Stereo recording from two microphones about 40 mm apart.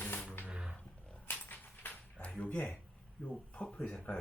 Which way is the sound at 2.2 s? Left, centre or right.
Left.